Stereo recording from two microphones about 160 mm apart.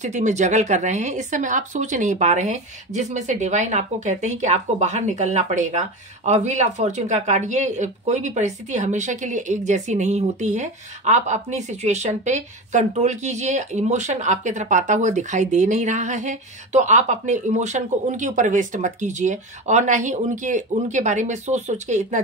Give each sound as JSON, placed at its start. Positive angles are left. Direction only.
{"t": 0.0, "sound": "speech", "side_deg": -50}